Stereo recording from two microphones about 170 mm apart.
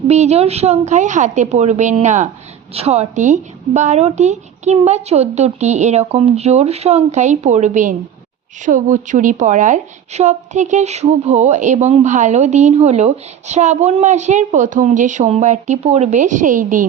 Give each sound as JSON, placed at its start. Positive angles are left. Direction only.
{"t": 0.1, "sound": "a woman's voice", "side_deg": -40}